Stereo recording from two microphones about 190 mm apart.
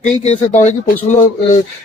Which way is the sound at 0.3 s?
35° left (ahead or behind).